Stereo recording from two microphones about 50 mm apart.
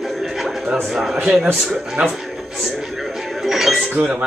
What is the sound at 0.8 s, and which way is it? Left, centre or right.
A man's voice, centre.